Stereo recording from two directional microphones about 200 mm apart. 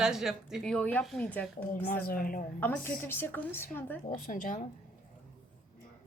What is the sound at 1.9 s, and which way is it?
Speech, 45° left (ahead or behind).